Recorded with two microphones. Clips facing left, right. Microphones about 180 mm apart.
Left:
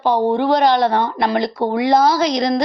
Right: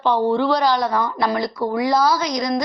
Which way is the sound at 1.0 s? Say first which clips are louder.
Left 3 dB; 25° left (ahead or behind).